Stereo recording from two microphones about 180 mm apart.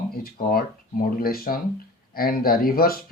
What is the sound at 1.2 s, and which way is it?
Speech, 55° left (ahead or behind).